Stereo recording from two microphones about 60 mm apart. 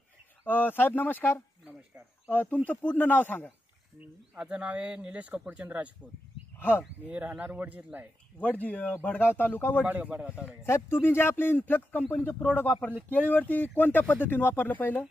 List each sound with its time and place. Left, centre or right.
0.4 s speech: left
4.4 s speech: centre
7.1 s speech: right
8.4 s speech: left
9.8 s speech: right
10.6 s speech: left